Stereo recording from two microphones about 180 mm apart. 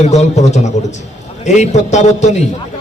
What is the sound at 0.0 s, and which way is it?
A man's voice, 40° left (ahead or behind).